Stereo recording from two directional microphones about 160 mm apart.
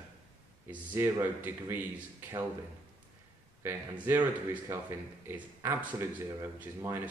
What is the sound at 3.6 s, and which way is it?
Speech, 15° right (ahead or behind).